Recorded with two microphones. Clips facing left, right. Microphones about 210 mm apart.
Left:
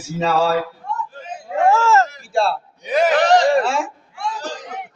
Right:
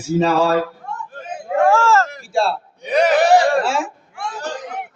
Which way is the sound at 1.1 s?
55° right (ahead or behind).